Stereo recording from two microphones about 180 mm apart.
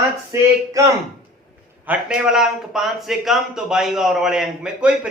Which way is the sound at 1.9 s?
5° right (ahead or behind).